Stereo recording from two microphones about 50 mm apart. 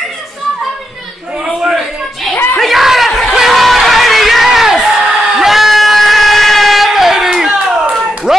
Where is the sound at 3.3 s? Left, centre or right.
Centre.